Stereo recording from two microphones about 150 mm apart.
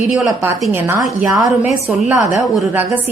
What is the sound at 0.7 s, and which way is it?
A woman's voice, 20° right (ahead or behind).